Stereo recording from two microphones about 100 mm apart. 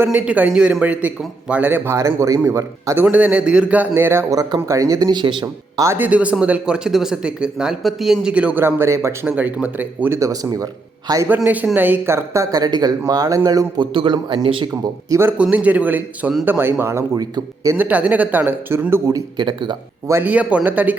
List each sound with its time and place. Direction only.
0.0 s a man's voice: 15° right (ahead or behind); by 3.0 s 30° right (ahead or behind)
3.0 s a man's voice: 15° right (ahead or behind); by 5.0 s 35° right (ahead or behind)
5.1 s a man's voice: 50° right (ahead or behind)
6.0 s a man's voice: 15° right (ahead or behind)
8.6 s speech: 25° right (ahead or behind)
9.3 s a man's voice: 15° right (ahead or behind)
10.2 s speech: 35° right (ahead or behind)
11.4 s speech: 15° right (ahead or behind); by 13.8 s 40° right (ahead or behind)
13.9 s speech: 55° right (ahead or behind)
15.1 s a man's voice: 25° right (ahead or behind)
17.2 s speech: 35° right (ahead or behind)
17.7 s speech: 15° right (ahead or behind)
19.4 s a man's voice: 50° right (ahead or behind)
20.2 s a man's voice: 15° right (ahead or behind)